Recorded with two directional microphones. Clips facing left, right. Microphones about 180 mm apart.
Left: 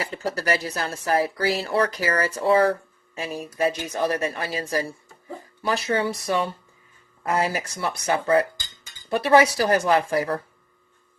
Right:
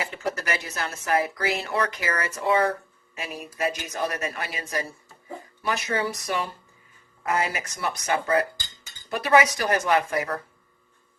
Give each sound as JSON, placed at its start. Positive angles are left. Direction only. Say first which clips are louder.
{"t": 0.0, "sound": "speech", "louder": "left 2 dB", "side_deg": 35}